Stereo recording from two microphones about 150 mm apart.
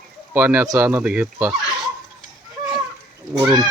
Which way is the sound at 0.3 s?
15° right (ahead or behind).